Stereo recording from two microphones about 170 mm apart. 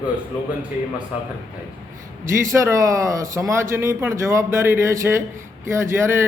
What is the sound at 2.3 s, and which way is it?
A man's voice, 15° right (ahead or behind).